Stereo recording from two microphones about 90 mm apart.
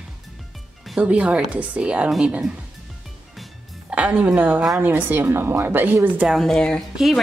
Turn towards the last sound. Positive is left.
turn(degrees=0)  # may be behind; listen again after turning